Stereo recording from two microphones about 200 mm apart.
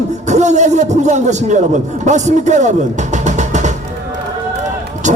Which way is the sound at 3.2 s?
35° right (ahead or behind).